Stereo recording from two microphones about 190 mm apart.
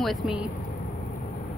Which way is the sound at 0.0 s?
Centre (ahead or behind).